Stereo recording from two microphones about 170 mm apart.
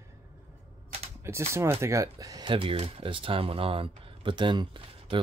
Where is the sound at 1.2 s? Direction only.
15° right (ahead or behind).